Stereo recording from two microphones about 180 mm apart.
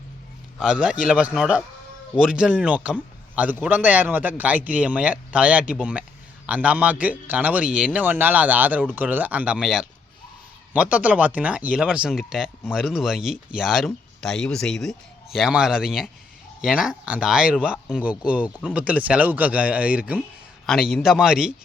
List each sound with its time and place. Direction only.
0.6 s speech: 5° right (ahead or behind)